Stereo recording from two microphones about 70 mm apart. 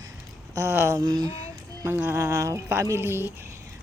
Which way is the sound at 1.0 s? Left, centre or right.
Right.